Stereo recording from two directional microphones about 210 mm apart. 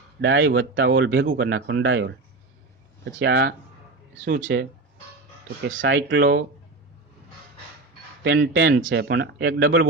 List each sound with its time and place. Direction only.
0.2 s speech: 60° right (ahead or behind)
5.8 s speech: 60° right (ahead or behind)
8.2 s speech: 55° right (ahead or behind)